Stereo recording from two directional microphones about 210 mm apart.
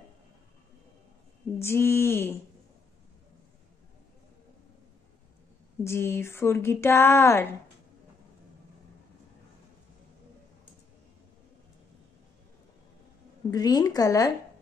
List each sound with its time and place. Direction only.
1.6 s speech: 10° left (ahead or behind)
5.9 s speech: 10° left (ahead or behind)
13.5 s speech: 20° left (ahead or behind)